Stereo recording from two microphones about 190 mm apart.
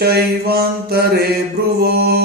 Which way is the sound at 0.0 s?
55° right (ahead or behind).